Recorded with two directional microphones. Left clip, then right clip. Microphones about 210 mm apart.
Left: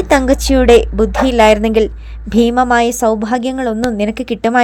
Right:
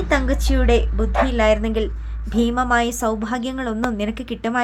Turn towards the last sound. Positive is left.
turn(degrees=30)  # may be behind; listen again after turning